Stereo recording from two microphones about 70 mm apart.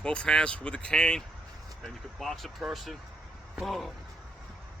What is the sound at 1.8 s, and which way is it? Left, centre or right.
Speech, centre.